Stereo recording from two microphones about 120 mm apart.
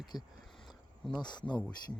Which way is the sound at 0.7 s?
Centre (ahead or behind).